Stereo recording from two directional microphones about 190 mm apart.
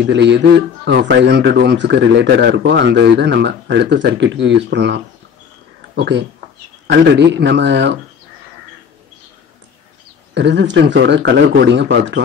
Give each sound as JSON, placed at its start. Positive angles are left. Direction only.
{"t": 0.0, "sound": "a man's voice", "side_deg": -65}
{"t": 10.3, "sound": "speech", "side_deg": -65}